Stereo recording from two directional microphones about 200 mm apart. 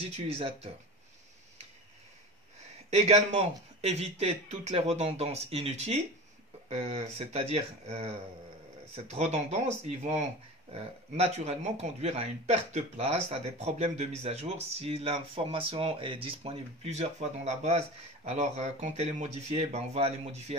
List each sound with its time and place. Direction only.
0.4 s speech: 30° right (ahead or behind)
2.9 s speech: 35° right (ahead or behind)